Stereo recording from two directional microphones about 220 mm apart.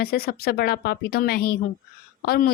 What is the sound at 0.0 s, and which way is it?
Speech, 45° left (ahead or behind).